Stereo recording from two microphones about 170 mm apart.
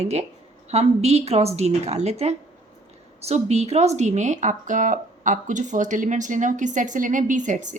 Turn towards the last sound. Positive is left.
turn(degrees=-45)  # may be behind; listen again after turning